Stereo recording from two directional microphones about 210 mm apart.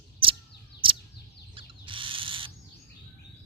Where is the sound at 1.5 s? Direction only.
25° right (ahead or behind).